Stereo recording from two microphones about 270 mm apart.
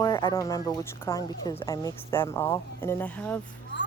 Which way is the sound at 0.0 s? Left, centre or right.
Centre.